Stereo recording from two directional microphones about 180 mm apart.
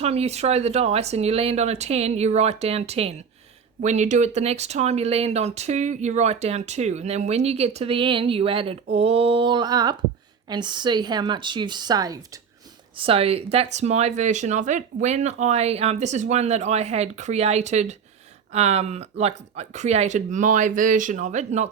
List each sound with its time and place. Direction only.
0.0 s speech: 35° right (ahead or behind); by 12.4 s 20° right (ahead or behind)
13.0 s speech: 30° right (ahead or behind)